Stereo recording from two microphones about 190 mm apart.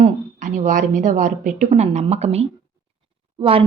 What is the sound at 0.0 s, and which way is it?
A woman's voice, 40° right (ahead or behind).